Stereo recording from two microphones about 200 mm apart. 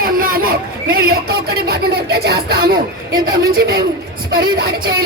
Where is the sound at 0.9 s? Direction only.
50° right (ahead or behind).